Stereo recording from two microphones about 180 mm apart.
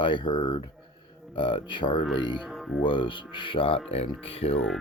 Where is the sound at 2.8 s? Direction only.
25° left (ahead or behind).